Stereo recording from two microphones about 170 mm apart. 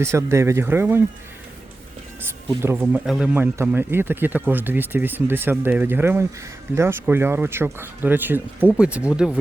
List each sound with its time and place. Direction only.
0.0 s speech: 15° right (ahead or behind)
2.6 s speech: 15° right (ahead or behind)